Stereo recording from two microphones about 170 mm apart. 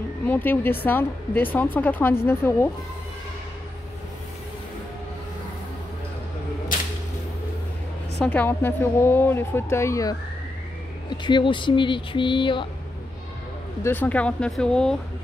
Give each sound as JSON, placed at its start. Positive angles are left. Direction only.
{"t": 0.3, "sound": "a woman's voice", "side_deg": 10}
{"t": 8.3, "sound": "a woman's voice", "side_deg": 10}
{"t": 13.8, "sound": "speech", "side_deg": 10}